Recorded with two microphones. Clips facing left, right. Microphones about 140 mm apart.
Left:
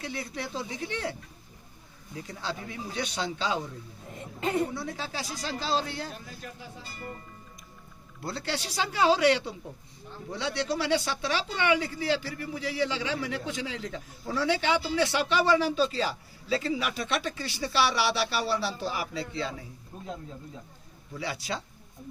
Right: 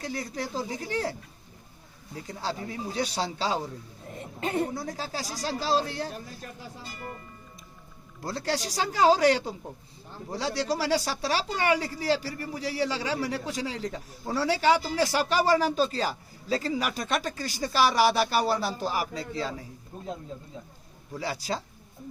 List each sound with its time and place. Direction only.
0.0 s speech: 40° right (ahead or behind)
2.1 s speech: 35° right (ahead or behind)
4.7 s speech: 40° right (ahead or behind)
8.2 s speech: 40° right (ahead or behind)
21.2 s speech: 35° right (ahead or behind)